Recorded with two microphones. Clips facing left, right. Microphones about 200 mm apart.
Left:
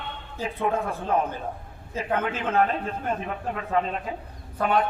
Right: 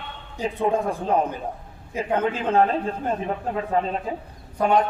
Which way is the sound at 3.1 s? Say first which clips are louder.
Right 3 dB; 30° right (ahead or behind).